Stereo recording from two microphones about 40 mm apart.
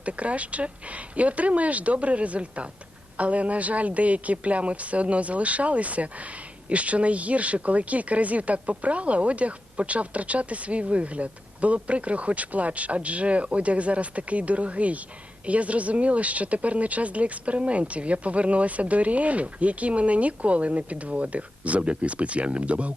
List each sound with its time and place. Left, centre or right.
0.0 s a woman's voice: right